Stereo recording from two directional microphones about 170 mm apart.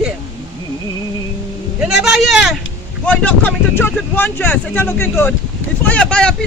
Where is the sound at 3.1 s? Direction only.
10° left (ahead or behind).